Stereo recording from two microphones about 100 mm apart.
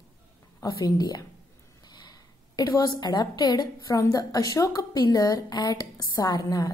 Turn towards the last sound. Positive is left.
turn(degrees=40)  # may be behind; listen again after turning